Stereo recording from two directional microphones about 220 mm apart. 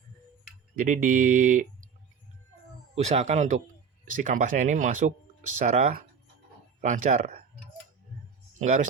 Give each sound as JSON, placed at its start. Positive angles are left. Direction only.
{"t": 0.8, "sound": "speech", "side_deg": -40}
{"t": 2.9, "sound": "speech", "side_deg": -30}
{"t": 8.5, "sound": "speech", "side_deg": -35}